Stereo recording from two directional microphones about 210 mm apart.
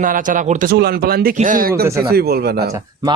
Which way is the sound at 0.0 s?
40° right (ahead or behind).